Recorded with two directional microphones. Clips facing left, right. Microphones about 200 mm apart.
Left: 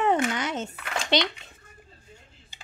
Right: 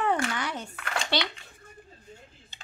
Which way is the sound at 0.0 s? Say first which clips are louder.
Left 4 dB; 20° left (ahead or behind).